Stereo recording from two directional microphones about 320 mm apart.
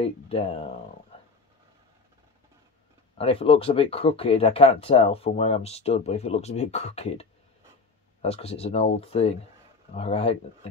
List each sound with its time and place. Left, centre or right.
0.0 s speech: centre
3.2 s speech: centre